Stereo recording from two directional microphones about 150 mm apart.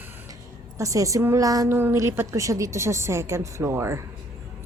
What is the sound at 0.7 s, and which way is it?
A woman's voice, 20° right (ahead or behind).